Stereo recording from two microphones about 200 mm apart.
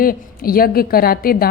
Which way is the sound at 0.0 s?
45° left (ahead or behind).